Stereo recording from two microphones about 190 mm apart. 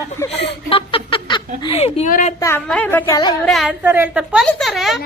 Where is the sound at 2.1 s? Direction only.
45° left (ahead or behind).